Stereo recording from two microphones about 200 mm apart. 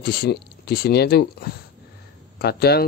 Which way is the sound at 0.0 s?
50° left (ahead or behind).